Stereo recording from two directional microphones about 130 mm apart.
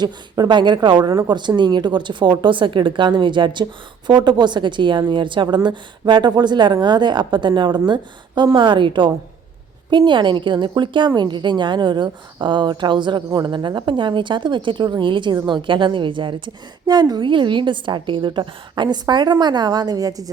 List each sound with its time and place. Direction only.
0.0 s a woman's voice: 35° right (ahead or behind)